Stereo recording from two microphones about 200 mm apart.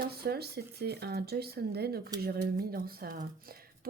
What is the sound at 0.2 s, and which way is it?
A woman's voice, 50° right (ahead or behind).